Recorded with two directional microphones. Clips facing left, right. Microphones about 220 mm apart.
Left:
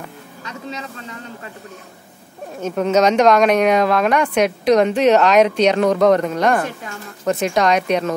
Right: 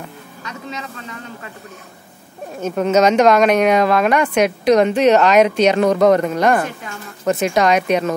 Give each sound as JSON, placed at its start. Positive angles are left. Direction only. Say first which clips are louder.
{"t": 0.4, "sound": "vehicle", "louder": "even", "side_deg": 30}
{"t": 2.6, "sound": "speech", "louder": "right 1 dB", "side_deg": -5}